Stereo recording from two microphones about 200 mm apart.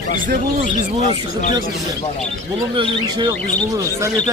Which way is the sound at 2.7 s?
25° right (ahead or behind).